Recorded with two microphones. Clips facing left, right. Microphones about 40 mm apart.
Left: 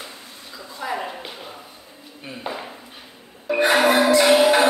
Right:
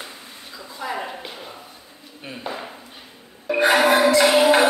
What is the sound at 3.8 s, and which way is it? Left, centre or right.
Music, right.